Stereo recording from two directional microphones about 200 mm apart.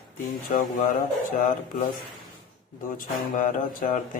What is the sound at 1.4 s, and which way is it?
Mantra, 40° left (ahead or behind).